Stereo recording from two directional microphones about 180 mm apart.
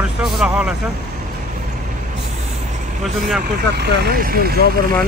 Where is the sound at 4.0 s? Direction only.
55° right (ahead or behind).